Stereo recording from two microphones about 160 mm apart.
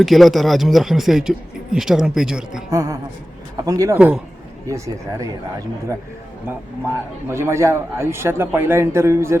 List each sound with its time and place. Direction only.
0.0 s a man's voice: centre (ahead or behind)
2.6 s speech: 20° right (ahead or behind)
3.9 s a man's voice: 5° right (ahead or behind)
4.6 s speech: 20° right (ahead or behind)
6.8 s a man's voice: 15° right (ahead or behind)